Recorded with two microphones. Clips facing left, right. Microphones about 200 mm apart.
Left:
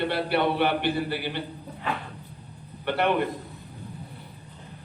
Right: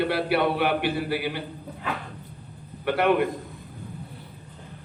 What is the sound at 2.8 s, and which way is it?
Speech, 50° right (ahead or behind).